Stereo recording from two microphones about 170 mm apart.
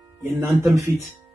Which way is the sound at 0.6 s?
15° right (ahead or behind).